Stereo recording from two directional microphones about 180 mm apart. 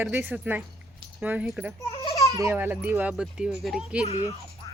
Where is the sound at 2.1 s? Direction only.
20° left (ahead or behind).